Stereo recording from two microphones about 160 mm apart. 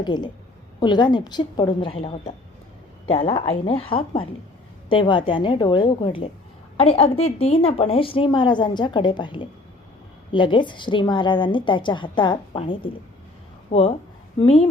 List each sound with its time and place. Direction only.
0.0 s a woman's voice: 25° left (ahead or behind)